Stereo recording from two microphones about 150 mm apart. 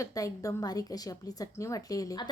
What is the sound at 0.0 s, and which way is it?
A woman's voice, 20° left (ahead or behind).